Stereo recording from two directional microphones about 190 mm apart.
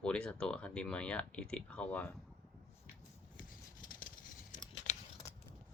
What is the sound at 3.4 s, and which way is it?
Scissors, 45° left (ahead or behind).